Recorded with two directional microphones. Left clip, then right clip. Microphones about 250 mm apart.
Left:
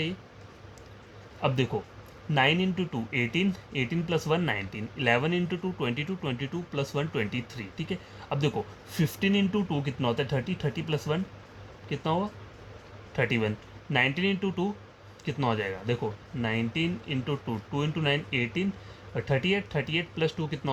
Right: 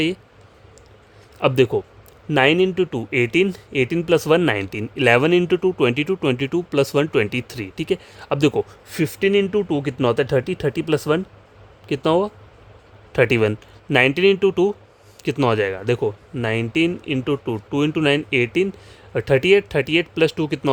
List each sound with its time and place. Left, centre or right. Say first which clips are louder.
1.4 s a man's voice: right 12 dB; right